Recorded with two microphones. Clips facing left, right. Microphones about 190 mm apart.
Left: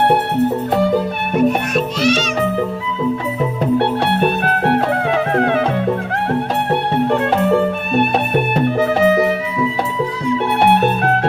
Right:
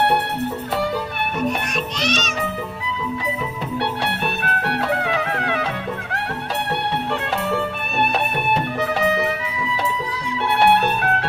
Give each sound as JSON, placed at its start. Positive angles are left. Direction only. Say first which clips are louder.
{"t": 1.5, "sound": "music", "louder": "left 7 dB", "side_deg": 5}
{"t": 3.8, "sound": "music", "louder": "left 6 dB", "side_deg": 50}
{"t": 6.7, "sound": "music", "louder": "left 7 dB", "side_deg": 50}